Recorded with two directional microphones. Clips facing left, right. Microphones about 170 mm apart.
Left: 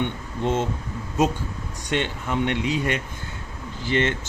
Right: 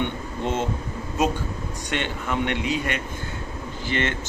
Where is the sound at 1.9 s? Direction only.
30° left (ahead or behind).